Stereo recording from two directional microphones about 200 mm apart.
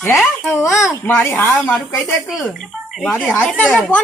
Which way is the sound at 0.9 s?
10° left (ahead or behind).